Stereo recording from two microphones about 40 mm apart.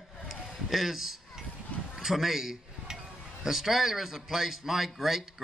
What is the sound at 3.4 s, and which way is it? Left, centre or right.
Speech, centre.